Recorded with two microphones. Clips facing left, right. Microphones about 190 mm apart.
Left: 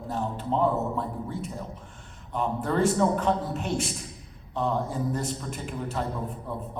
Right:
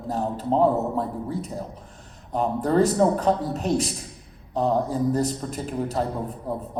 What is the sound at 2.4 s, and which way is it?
A man's voice, 35° right (ahead or behind).